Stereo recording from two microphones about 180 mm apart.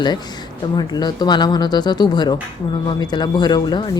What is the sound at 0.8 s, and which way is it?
Speech, 25° left (ahead or behind).